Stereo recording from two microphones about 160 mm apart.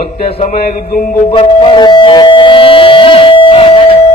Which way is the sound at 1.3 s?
30° left (ahead or behind).